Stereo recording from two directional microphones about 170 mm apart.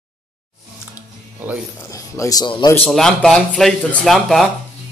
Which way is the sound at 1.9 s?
20° left (ahead or behind).